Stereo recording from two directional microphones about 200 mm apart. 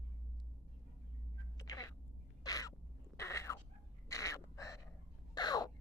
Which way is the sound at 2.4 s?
20° left (ahead or behind).